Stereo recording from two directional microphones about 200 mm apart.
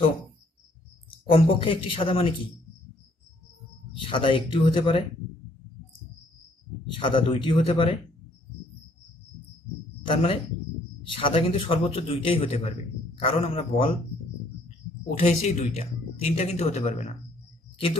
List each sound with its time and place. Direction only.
1.3 s a man's voice: 25° left (ahead or behind)
3.9 s a man's voice: 25° left (ahead or behind)
7.0 s a man's voice: 25° left (ahead or behind)
10.0 s a man's voice: 25° left (ahead or behind)
15.1 s speech: 30° left (ahead or behind)